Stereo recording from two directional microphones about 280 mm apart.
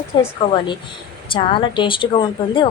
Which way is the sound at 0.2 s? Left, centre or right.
Centre.